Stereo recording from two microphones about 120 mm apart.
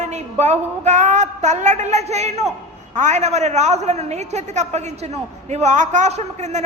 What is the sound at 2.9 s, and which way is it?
A woman's voice, 85° right.